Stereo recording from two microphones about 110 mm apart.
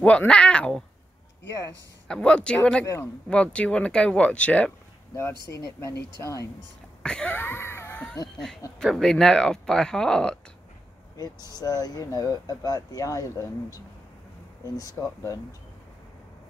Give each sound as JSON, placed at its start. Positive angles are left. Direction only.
{"t": 0.0, "sound": "speech", "side_deg": 10}
{"t": 2.0, "sound": "speech", "side_deg": 10}
{"t": 5.1, "sound": "speech", "side_deg": 25}
{"t": 7.0, "sound": "a sound", "side_deg": 10}
{"t": 8.7, "sound": "speech", "side_deg": 5}
{"t": 11.1, "sound": "speech", "side_deg": 35}